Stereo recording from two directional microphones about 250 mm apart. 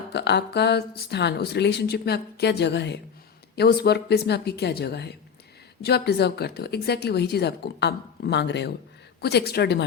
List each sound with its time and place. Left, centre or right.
0.1 s speech: left